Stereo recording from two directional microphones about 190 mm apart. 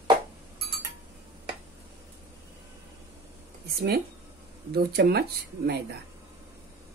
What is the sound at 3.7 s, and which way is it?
Speech, 55° right (ahead or behind).